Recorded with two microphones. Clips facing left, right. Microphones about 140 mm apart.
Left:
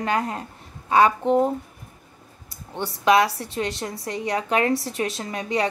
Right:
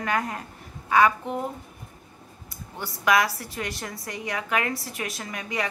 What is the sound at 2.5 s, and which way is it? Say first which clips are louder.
A woman's voice: left 6 dB; 30° left (ahead or behind).